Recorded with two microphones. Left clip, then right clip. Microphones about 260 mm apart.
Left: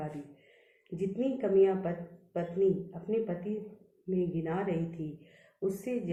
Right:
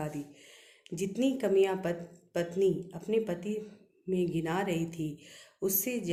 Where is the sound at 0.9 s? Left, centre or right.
Right.